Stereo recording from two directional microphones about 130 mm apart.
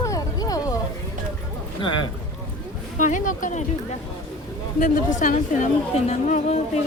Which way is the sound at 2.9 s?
75° left (ahead or behind).